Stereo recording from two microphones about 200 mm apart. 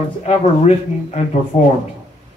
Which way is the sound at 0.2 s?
30° left (ahead or behind).